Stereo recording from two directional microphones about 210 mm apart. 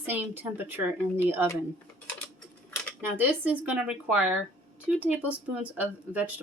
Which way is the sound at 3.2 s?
10° right (ahead or behind).